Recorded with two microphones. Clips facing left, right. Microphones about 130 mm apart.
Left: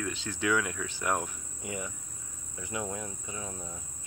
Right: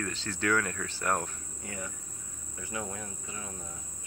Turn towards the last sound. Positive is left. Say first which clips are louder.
# left 2 dB
turn(degrees=20)  # may be behind; listen again after turning